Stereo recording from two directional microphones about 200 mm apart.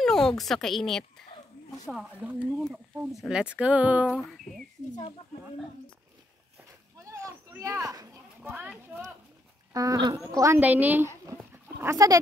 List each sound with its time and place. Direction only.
0.0 s speech: centre (ahead or behind)
7.1 s a sound: 15° right (ahead or behind)
8.4 s speech: 5° right (ahead or behind)
11.5 s dog: 15° right (ahead or behind)